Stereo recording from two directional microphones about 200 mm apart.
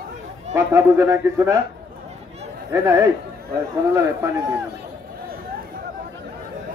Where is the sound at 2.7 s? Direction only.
10° right (ahead or behind).